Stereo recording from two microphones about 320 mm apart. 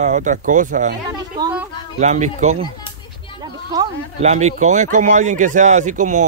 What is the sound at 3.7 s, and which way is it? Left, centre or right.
Speech, right.